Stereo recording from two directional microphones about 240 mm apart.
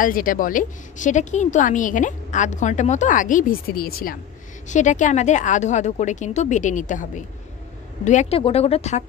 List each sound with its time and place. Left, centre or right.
0.0 s a woman's voice: left